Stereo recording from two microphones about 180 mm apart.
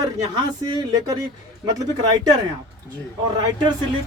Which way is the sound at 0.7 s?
25° right (ahead or behind).